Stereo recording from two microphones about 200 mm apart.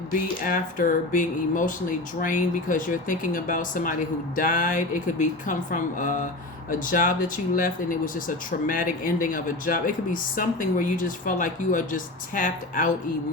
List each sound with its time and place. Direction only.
0.4 s speech: 40° left (ahead or behind)